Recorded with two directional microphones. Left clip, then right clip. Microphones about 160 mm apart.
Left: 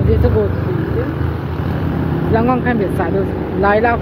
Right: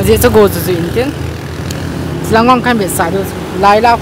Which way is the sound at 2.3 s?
55° right (ahead or behind).